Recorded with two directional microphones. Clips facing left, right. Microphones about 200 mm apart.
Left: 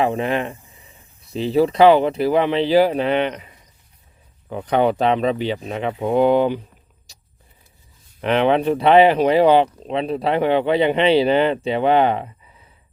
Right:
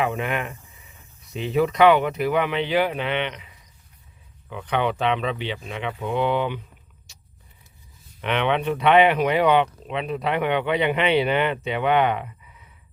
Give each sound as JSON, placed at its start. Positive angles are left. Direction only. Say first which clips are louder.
{"t": 0.0, "sound": "speech", "louder": "left 5 dB", "side_deg": 30}
{"t": 7.1, "sound": "vehicle", "louder": "left 5 dB", "side_deg": 35}
{"t": 8.2, "sound": "speech", "louder": "left 6 dB", "side_deg": 35}